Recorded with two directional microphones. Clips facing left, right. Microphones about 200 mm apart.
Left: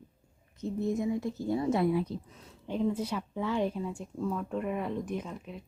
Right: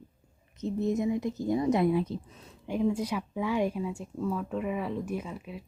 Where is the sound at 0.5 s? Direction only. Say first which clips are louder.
Right 2 dB; 20° right (ahead or behind).